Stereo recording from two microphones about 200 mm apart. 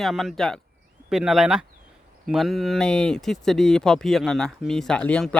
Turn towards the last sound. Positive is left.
turn(degrees=5)  # may be behind; listen again after turning